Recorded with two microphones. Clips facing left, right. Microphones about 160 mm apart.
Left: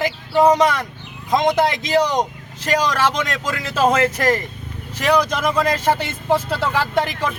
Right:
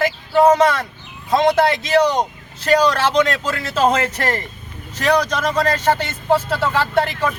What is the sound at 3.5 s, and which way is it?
Speech, 10° left (ahead or behind).